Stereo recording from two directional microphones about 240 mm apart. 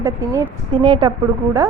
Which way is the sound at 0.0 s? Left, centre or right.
Centre.